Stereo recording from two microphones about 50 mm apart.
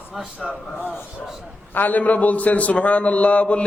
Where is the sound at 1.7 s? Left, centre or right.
Left.